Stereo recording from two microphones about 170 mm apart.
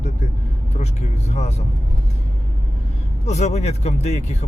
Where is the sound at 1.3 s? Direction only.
40° left (ahead or behind).